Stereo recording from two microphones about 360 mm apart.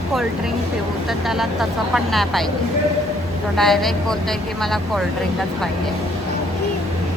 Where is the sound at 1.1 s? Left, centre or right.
Centre.